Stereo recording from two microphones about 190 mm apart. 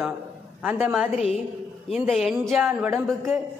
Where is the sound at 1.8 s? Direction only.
Centre (ahead or behind).